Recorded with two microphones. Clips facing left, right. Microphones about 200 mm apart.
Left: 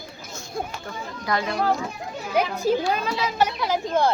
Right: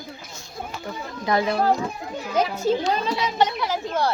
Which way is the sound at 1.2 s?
25° right (ahead or behind).